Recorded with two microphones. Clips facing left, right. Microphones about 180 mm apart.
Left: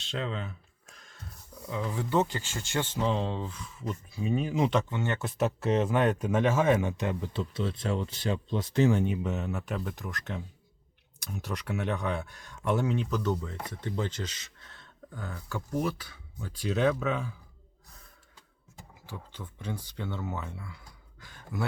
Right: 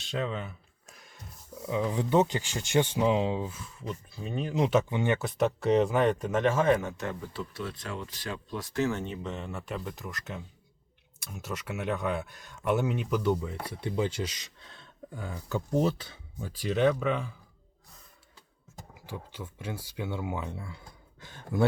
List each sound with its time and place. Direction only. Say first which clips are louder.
0.1 s speech: right 2 dB; 10° right (ahead or behind)
0.9 s dog: right 2 dB; 10° right (ahead or behind)
1.7 s speech: right 3 dB; 15° right (ahead or behind)
5.2 s speech: right 2 dB; centre (ahead or behind)
6.9 s speech: left 3 dB; 15° left (ahead or behind); by 16.1 s 25° right (ahead or behind)
16.5 s speech: right 1 dB; centre (ahead or behind)
19.0 s speech: right 3 dB; 10° right (ahead or behind); by 21.7 s 25° right (ahead or behind)